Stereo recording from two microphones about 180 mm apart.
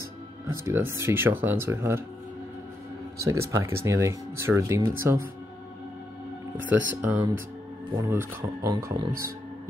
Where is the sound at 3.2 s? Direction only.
15° right (ahead or behind).